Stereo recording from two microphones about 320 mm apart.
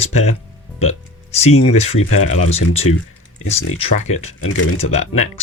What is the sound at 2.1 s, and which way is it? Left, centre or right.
Speech, left.